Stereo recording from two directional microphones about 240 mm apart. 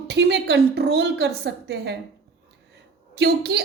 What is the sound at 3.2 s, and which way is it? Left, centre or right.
Speech, right.